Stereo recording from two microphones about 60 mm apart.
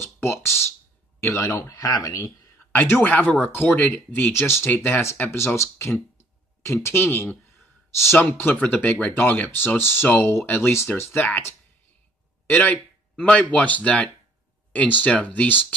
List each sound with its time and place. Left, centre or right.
0.0 s speech: left
1.8 s speech: left
2.8 s speech: left
4.3 s speech: left
4.6 s speech: left
5.3 s speech: left
7.9 s speech: left
8.2 s speech: left
11.1 s speech: left
12.4 s speech: left